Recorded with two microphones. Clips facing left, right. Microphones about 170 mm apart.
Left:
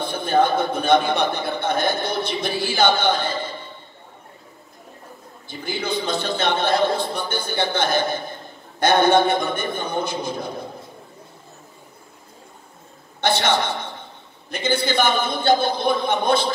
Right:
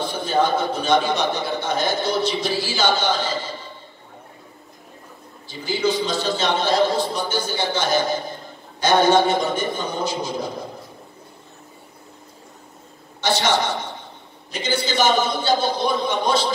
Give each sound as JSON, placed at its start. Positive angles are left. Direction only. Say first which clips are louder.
{"t": 0.0, "sound": "a man's voice", "louder": "left 1 dB", "side_deg": 55}
{"t": 5.5, "sound": "a man's voice", "louder": "right 4 dB", "side_deg": 55}
{"t": 13.2, "sound": "a woman's voice", "louder": "even", "side_deg": 55}